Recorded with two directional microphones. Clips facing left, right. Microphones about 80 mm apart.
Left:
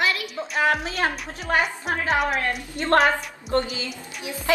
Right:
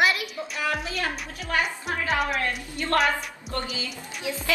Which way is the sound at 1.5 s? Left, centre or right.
Left.